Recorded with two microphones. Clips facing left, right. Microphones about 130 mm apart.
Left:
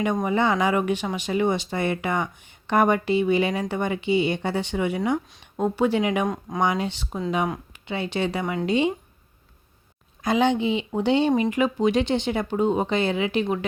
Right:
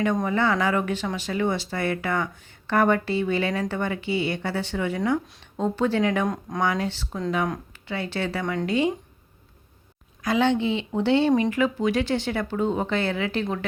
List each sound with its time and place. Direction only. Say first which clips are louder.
0.3 s speech: left 1 dB; 20° left (ahead or behind)
6.2 s speech: even; centre (ahead or behind)
6.6 s speech: left 1 dB; 20° left (ahead or behind)
10.2 s speech: left 1 dB; 15° left (ahead or behind)